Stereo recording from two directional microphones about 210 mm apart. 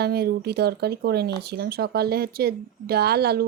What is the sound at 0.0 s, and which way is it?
Speech, 50° right (ahead or behind).